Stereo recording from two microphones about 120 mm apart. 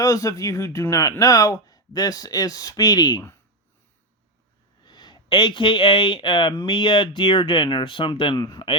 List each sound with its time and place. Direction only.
0.0 s speech: 30° left (ahead or behind)
4.8 s speech: 35° left (ahead or behind)